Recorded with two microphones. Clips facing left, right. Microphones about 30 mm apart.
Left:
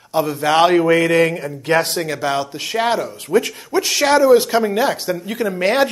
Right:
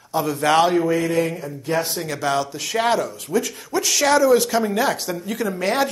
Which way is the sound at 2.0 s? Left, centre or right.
Centre.